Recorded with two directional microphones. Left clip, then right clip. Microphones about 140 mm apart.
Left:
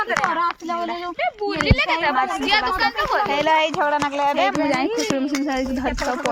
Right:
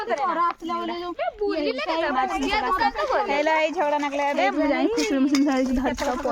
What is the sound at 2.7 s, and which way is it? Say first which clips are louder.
Speech: left 2 dB; 90° right.